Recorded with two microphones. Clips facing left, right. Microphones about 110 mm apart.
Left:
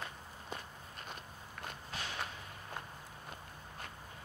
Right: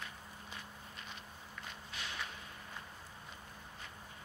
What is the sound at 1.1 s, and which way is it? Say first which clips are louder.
Walk: left 3 dB; 50° left (ahead or behind).